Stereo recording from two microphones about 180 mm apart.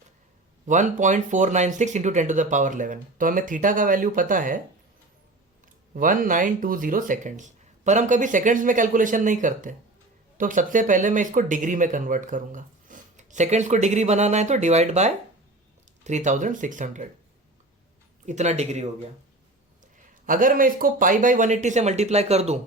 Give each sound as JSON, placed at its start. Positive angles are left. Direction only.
{"t": 0.7, "sound": "speech", "side_deg": -45}
{"t": 5.9, "sound": "speech", "side_deg": -50}
{"t": 18.3, "sound": "speech", "side_deg": -40}
{"t": 20.2, "sound": "speech", "side_deg": -50}